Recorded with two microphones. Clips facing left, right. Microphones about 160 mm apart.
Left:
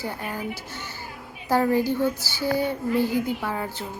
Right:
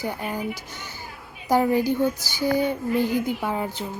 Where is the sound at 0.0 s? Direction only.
15° right (ahead or behind).